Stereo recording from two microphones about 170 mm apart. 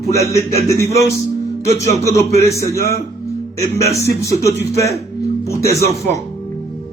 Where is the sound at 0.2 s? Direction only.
15° left (ahead or behind).